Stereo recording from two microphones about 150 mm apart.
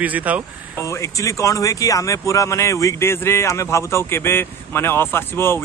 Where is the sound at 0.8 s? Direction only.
20° left (ahead or behind).